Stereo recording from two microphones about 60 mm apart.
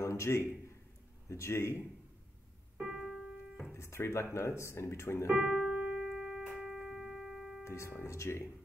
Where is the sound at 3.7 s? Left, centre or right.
Left.